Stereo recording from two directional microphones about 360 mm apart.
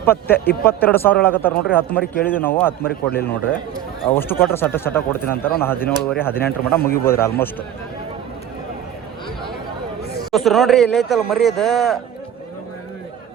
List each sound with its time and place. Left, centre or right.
0.0 s speech: centre
2.8 s a man's voice: left
4.1 s speech: centre
5.3 s a man's voice: left
5.6 s speech: centre
10.3 s speech: centre